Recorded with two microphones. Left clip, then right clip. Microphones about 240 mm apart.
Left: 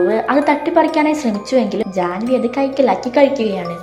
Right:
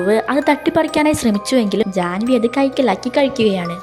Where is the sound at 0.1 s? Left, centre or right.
Right.